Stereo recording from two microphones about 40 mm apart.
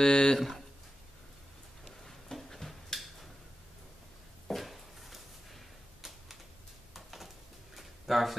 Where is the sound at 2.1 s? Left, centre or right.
Centre.